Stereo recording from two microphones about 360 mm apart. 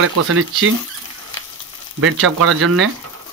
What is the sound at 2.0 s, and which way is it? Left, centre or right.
Speech, right.